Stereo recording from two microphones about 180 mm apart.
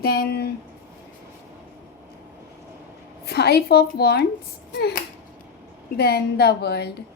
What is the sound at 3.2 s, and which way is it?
A woman's voice, 65° left (ahead or behind).